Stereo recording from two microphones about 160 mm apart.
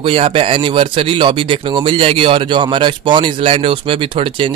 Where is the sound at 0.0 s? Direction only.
35° right (ahead or behind).